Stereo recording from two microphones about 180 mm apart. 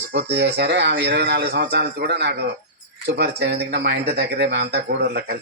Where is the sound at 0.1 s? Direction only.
70° right (ahead or behind).